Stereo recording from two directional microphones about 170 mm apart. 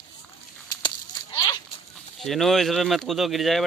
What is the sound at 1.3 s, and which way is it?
Zipper, 25° left (ahead or behind).